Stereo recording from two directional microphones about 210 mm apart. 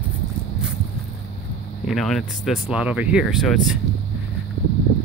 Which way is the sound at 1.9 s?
Centre (ahead or behind).